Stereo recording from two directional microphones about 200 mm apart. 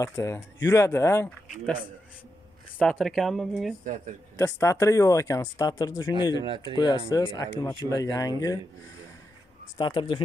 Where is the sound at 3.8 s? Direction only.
40° right (ahead or behind).